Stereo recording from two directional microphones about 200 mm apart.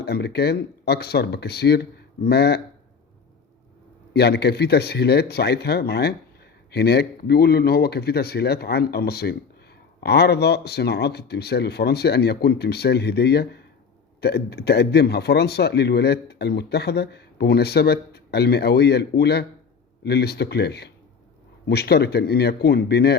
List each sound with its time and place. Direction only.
0.0 s speech: 55° left (ahead or behind)
4.1 s a man's voice: 55° left (ahead or behind)